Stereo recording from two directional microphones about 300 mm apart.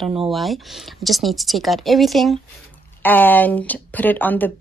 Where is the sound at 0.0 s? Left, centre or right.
Centre.